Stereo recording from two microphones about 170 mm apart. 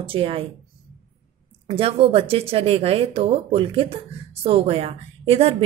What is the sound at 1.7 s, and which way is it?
A woman's voice, 35° right (ahead or behind).